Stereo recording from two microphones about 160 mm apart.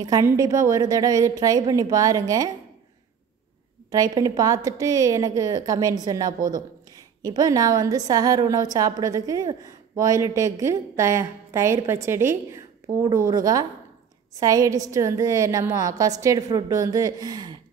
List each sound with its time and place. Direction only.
0.0 s a woman's voice: 25° right (ahead or behind)
3.9 s a woman's voice: 25° right (ahead or behind)